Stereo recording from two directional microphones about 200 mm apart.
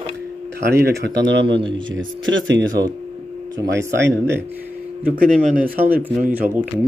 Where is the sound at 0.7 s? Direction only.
55° right (ahead or behind).